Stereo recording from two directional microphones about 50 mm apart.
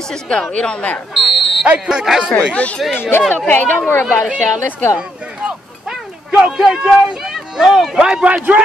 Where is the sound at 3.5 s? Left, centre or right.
Left.